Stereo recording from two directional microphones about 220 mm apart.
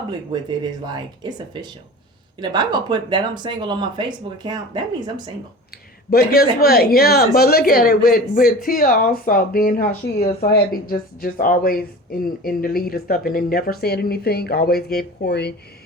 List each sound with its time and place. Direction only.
0.6 s speech: 20° right (ahead or behind)
2.4 s speech: 20° right (ahead or behind)
6.1 s a man's voice: 45° left (ahead or behind)